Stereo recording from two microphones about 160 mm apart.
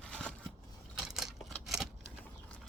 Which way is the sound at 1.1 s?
Centre (ahead or behind).